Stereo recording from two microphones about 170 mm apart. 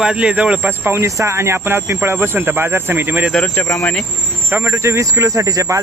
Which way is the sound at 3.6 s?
15° left (ahead or behind).